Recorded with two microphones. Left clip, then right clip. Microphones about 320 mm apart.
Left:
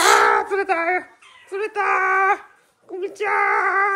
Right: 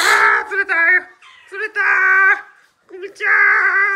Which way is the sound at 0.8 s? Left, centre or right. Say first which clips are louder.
Right 8 dB; left.